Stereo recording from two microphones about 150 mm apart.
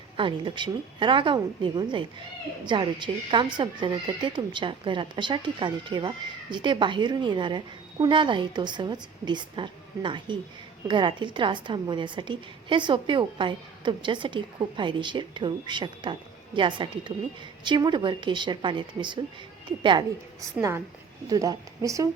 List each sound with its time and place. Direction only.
0.2 s a woman's voice: 30° right (ahead or behind)